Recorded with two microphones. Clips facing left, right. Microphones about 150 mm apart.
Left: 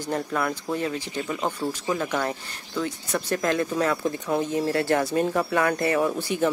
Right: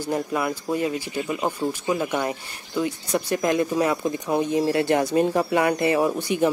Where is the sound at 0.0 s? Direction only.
10° right (ahead or behind).